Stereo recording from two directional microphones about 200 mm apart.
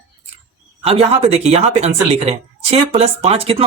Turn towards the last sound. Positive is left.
turn(degrees=-30)  # may be behind; listen again after turning